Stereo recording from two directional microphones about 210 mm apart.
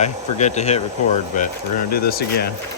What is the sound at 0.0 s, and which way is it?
Speech, 35° left (ahead or behind).